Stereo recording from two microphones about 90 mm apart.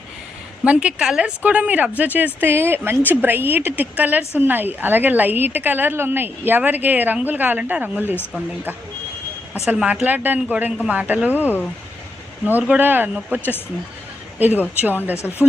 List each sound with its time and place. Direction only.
0.6 s a woman's voice: 15° right (ahead or behind)
9.6 s speech: 15° right (ahead or behind)
12.5 s a woman's voice: 20° right (ahead or behind)